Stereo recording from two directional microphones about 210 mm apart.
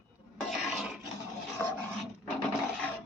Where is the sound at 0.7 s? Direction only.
5° right (ahead or behind).